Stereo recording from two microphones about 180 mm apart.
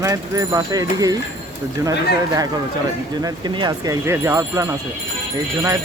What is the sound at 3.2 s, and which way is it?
Speech, 25° right (ahead or behind).